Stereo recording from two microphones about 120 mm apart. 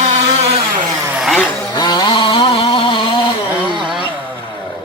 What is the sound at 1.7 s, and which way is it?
Vehicle, 35° left (ahead or behind).